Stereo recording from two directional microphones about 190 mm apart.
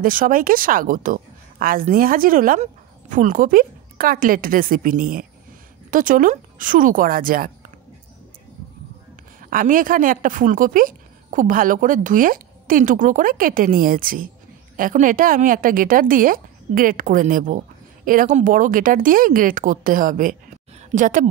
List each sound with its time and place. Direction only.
0.0 s a woman's voice: 45° right (ahead or behind)
9.4 s a woman's voice: 45° right (ahead or behind)